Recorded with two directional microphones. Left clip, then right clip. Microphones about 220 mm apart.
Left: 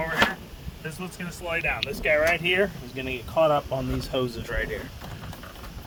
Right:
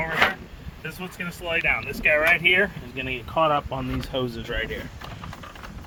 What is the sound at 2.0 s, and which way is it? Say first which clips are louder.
Speech: right 3 dB; 5° left (ahead or behind).